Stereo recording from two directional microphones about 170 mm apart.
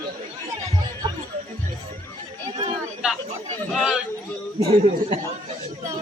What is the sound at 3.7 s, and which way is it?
Speech, centre (ahead or behind).